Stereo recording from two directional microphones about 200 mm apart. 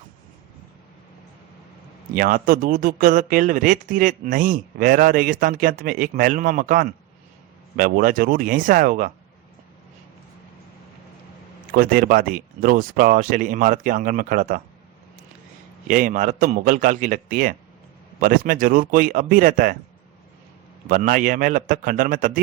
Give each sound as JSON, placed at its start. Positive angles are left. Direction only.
{"t": 2.1, "sound": "speech", "side_deg": -45}
{"t": 11.7, "sound": "speech", "side_deg": -45}
{"t": 15.9, "sound": "a man's voice", "side_deg": -40}
{"t": 20.8, "sound": "a man's voice", "side_deg": -45}